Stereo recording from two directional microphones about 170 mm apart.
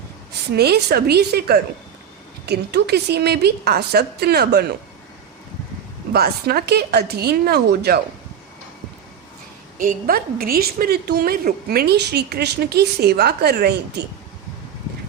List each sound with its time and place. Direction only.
0.5 s a woman's voice: 70° right (ahead or behind)
6.1 s a woman's voice: 65° right (ahead or behind)
9.7 s a woman's voice: 55° right (ahead or behind); by 14.0 s 80° right